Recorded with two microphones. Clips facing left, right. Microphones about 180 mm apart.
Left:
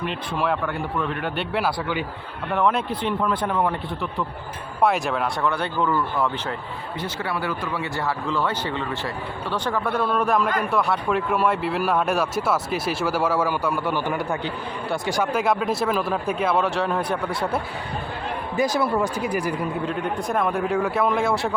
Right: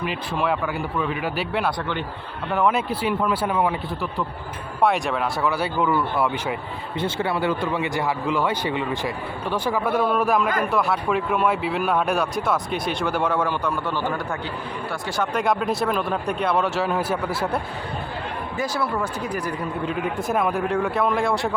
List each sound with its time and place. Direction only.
0.0 s speech: centre (ahead or behind)
4.8 s speech: centre (ahead or behind)
7.0 s speech: 25° right (ahead or behind); by 17.6 s centre (ahead or behind)
18.5 s speech: 15° left (ahead or behind)
19.9 s speech: 5° right (ahead or behind)